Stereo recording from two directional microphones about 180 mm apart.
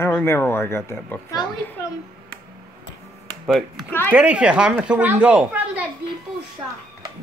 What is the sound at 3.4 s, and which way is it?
A woman's voice, centre (ahead or behind).